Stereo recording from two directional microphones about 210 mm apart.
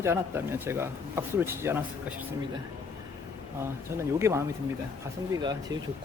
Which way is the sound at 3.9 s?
15° right (ahead or behind).